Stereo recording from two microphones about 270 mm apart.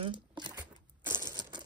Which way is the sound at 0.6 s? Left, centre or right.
Centre.